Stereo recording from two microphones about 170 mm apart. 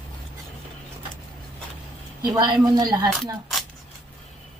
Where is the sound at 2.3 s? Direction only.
25° right (ahead or behind).